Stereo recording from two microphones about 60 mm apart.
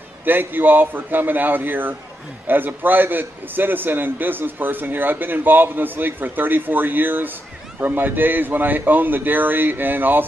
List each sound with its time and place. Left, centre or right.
0.2 s a man's voice: right